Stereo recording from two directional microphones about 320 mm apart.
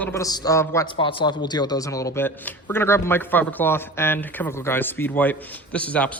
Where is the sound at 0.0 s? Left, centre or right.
Centre.